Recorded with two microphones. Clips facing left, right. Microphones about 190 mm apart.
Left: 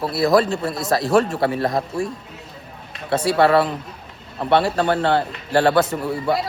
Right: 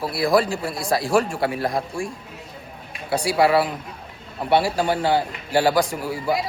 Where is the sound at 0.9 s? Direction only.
Centre (ahead or behind).